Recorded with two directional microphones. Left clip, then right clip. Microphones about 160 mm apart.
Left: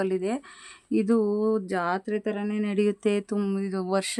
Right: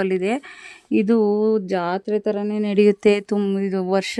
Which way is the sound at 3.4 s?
20° right (ahead or behind).